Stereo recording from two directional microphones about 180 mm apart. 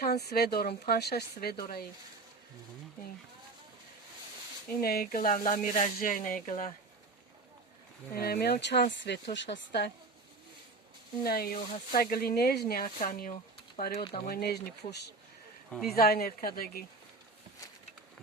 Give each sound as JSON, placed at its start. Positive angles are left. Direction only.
{"t": 0.0, "sound": "speech", "side_deg": 65}
{"t": 4.8, "sound": "speech", "side_deg": 55}
{"t": 8.1, "sound": "speech", "side_deg": 60}
{"t": 11.2, "sound": "speech", "side_deg": 55}
{"t": 13.9, "sound": "speech", "side_deg": 35}
{"t": 14.3, "sound": "speech", "side_deg": 60}
{"t": 15.7, "sound": "speech", "side_deg": 0}
{"t": 16.0, "sound": "speech", "side_deg": 55}